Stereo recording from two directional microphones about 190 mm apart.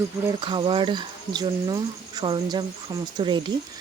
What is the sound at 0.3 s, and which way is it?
Speech, 25° right (ahead or behind).